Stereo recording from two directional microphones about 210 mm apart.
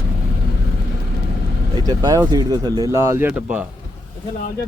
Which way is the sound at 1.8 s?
20° right (ahead or behind).